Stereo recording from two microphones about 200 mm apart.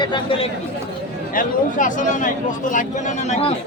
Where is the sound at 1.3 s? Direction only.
40° left (ahead or behind).